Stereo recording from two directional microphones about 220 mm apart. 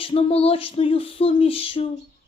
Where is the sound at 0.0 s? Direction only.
25° left (ahead or behind).